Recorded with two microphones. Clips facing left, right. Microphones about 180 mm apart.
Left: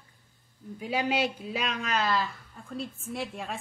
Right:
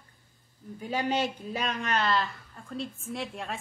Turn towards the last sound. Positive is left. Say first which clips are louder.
# even
turn(degrees=0)  # may be behind; listen again after turning